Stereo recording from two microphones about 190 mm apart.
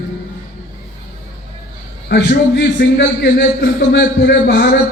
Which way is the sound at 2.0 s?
55° left (ahead or behind).